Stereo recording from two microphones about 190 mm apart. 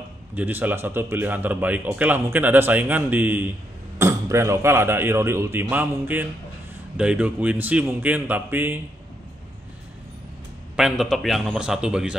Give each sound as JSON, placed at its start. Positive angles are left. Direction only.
{"t": 0.3, "sound": "speech", "side_deg": -10}
{"t": 10.8, "sound": "a man's voice", "side_deg": 0}